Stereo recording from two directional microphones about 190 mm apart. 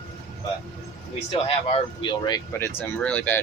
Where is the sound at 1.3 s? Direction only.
30° left (ahead or behind).